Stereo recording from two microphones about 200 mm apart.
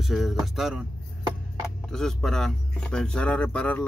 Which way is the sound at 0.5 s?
Centre (ahead or behind).